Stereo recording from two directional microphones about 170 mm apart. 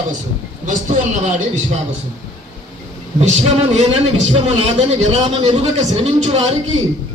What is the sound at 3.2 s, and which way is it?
A man's voice, 40° right (ahead or behind).